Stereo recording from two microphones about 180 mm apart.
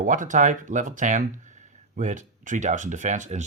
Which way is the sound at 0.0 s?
45° right (ahead or behind).